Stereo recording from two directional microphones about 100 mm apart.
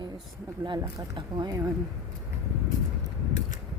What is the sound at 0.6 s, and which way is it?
Speech, 50° right (ahead or behind).